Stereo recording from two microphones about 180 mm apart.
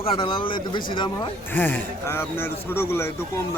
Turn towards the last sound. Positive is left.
turn(degrees=15)  # may be behind; listen again after turning